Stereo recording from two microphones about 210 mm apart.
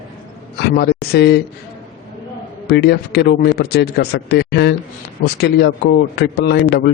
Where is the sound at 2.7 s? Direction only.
50° left (ahead or behind).